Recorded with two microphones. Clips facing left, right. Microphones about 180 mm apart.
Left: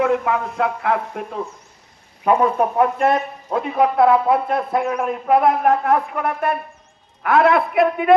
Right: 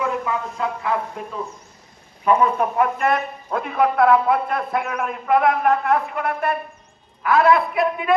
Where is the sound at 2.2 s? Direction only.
35° left (ahead or behind).